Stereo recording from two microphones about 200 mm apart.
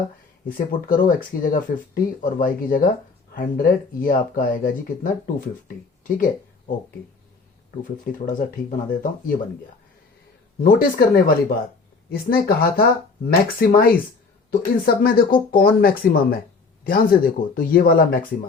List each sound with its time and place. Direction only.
0.4 s speech: 45° left (ahead or behind)
8.3 s speech: 40° left (ahead or behind)
10.6 s speech: 50° left (ahead or behind)